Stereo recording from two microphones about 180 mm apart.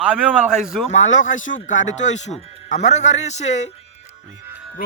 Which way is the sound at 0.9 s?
40° left (ahead or behind).